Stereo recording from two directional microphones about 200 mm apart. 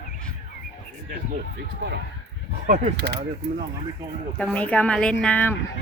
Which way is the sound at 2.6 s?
40° right (ahead or behind).